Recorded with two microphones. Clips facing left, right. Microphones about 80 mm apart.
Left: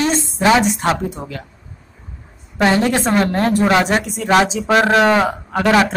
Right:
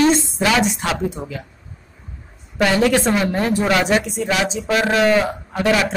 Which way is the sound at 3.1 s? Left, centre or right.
Left.